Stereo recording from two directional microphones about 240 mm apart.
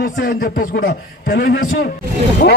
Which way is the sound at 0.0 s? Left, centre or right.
Left.